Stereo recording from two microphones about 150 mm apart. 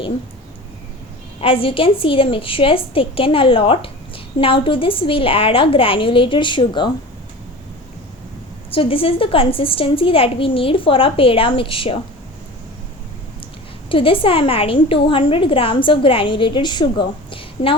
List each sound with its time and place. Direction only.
1.4 s a woman's voice: 35° left (ahead or behind)
8.7 s a woman's voice: 40° left (ahead or behind)
13.9 s a woman's voice: 35° left (ahead or behind)